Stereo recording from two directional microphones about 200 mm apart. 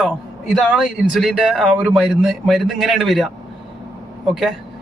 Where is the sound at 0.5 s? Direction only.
Centre (ahead or behind).